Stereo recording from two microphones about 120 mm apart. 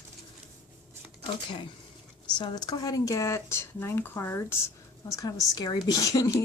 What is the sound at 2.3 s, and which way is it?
A woman's voice, 35° left (ahead or behind).